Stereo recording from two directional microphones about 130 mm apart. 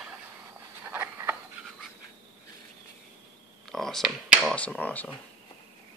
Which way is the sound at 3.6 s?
Centre (ahead or behind).